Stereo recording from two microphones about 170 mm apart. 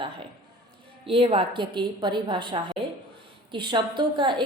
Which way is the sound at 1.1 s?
30° right (ahead or behind).